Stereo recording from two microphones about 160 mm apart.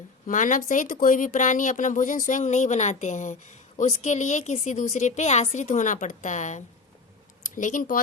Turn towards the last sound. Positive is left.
turn(degrees=55)  # may be behind; listen again after turning